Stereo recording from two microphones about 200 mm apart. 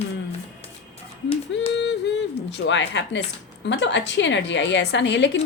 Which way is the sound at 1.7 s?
60° left (ahead or behind).